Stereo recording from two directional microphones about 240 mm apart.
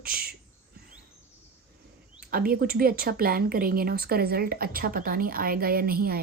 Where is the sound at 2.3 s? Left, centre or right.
Right.